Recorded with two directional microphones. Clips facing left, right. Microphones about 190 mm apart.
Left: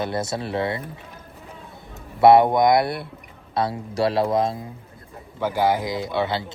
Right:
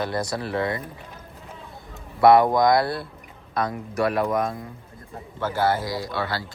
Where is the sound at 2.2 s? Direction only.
25° left (ahead or behind).